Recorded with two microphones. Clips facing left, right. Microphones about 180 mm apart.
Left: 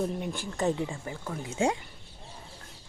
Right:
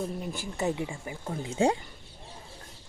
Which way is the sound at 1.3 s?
30° right (ahead or behind).